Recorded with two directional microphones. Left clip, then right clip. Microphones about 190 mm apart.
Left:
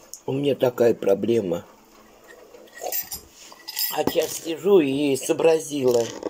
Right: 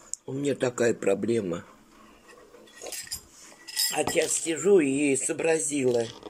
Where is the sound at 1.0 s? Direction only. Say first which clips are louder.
Left 5 dB; 45° left (ahead or behind).